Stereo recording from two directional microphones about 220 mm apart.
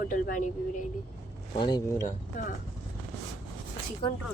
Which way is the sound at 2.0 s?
40° left (ahead or behind).